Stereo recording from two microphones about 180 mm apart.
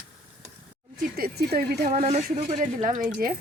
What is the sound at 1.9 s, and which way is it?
Speech, 40° right (ahead or behind).